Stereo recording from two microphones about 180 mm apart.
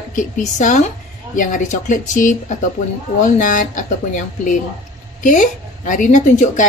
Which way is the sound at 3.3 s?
45° left (ahead or behind).